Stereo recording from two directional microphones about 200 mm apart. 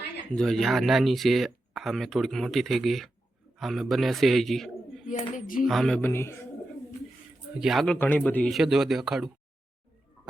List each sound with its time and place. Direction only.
0.3 s speech: centre (ahead or behind)
5.0 s a sound: 40° left (ahead or behind)
5.6 s speech: centre (ahead or behind)
7.6 s speech: centre (ahead or behind)